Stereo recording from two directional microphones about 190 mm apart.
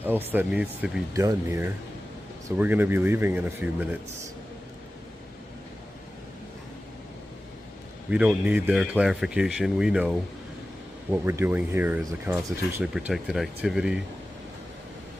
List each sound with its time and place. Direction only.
0.3 s speech: 10° right (ahead or behind)
8.1 s speech: 5° right (ahead or behind)